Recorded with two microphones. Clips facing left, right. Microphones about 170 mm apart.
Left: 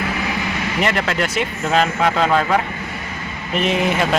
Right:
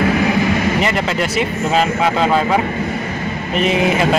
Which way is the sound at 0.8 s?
Centre (ahead or behind).